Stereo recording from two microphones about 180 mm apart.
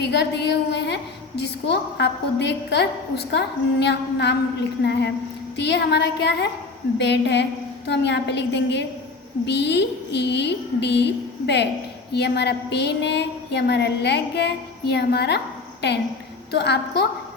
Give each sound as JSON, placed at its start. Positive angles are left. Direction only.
{"t": 0.0, "sound": "a woman's voice", "side_deg": 70}